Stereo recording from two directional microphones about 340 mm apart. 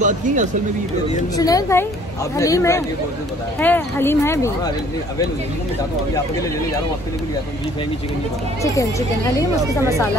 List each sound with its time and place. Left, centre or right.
0.0 s speech: right
1.3 s speech: centre